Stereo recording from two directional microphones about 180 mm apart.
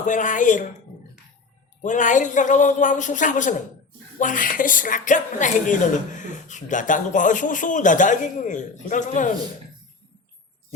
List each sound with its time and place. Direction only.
0.0 s a woman's voice: 45° left (ahead or behind)
1.8 s a woman's voice: 45° left (ahead or behind)